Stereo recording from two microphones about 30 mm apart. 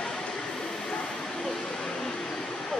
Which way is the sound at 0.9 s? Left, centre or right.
Centre.